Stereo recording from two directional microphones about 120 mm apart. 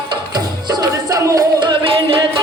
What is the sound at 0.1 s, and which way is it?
Music, 35° right (ahead or behind).